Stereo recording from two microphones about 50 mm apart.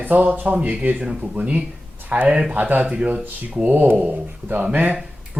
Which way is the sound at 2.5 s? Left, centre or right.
Right.